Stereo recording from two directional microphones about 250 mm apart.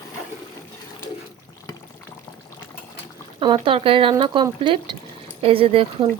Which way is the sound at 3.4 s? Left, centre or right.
Centre.